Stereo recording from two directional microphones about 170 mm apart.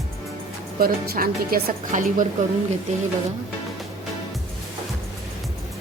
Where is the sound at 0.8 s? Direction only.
60° right (ahead or behind).